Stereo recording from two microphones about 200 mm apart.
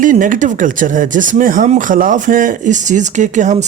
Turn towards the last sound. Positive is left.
turn(degrees=-35)  # may be behind; listen again after turning